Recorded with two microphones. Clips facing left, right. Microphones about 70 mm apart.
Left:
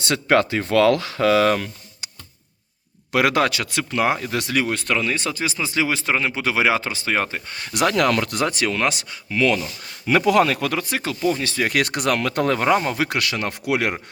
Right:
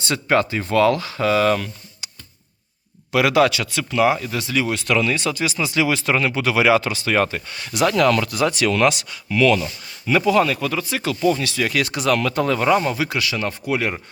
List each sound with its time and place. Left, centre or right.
0.0 s speech: left
3.1 s speech: left
4.9 s speech: left
7.4 s speech: left
7.7 s speech: left
8.5 s speech: left
10.1 s speech: left
11.7 s speech: left